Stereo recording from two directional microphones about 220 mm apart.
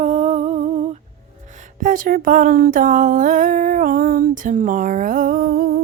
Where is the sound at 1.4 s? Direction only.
35° right (ahead or behind).